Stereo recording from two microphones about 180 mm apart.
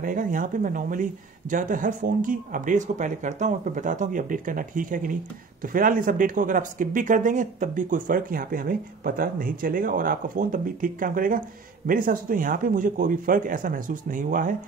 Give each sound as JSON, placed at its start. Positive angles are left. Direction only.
{"t": 0.0, "sound": "speech", "side_deg": -50}